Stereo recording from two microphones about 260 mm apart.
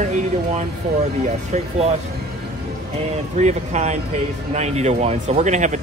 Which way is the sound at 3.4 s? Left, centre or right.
Right.